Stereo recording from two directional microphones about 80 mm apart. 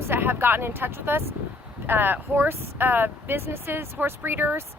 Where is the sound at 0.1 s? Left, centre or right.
Right.